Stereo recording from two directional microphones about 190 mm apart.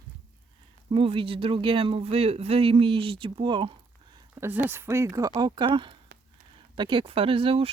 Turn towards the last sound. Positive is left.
turn(degrees=-30)  # may be behind; listen again after turning